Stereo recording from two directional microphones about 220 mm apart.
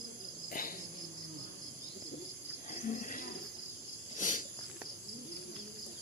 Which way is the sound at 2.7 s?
35° left (ahead or behind).